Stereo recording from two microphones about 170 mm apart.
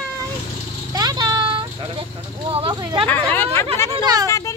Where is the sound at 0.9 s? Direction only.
25° right (ahead or behind).